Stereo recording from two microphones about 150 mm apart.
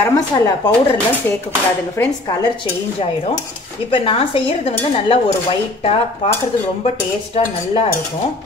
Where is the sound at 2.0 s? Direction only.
15° left (ahead or behind).